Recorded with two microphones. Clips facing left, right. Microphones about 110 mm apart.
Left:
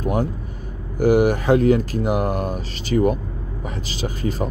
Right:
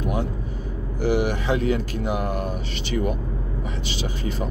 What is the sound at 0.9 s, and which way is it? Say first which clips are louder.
Speech: left 6 dB; 45° left (ahead or behind).